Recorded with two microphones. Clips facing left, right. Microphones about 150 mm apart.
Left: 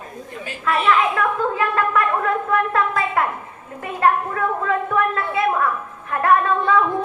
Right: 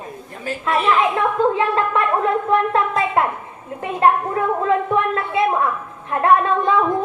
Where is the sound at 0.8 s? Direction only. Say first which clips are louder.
Right 1 dB; 25° right (ahead or behind).